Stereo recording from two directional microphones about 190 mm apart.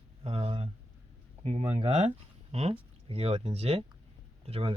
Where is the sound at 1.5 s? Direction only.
35° right (ahead or behind).